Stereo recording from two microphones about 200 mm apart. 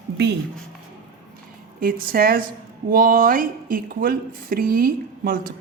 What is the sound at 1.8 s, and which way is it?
A woman's voice, 45° right (ahead or behind).